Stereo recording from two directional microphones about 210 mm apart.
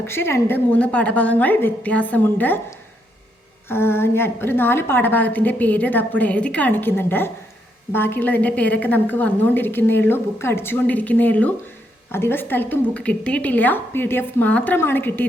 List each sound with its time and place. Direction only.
0.0 s a woman's voice: 10° left (ahead or behind)